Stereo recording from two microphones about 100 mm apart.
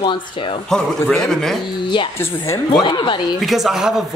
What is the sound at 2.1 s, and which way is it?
Speech, 30° left (ahead or behind).